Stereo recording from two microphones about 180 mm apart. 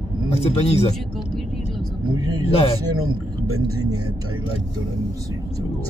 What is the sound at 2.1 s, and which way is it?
Speech, 20° right (ahead or behind).